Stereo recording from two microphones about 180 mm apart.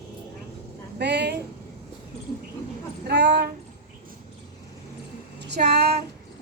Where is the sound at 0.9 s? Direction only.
70° right (ahead or behind).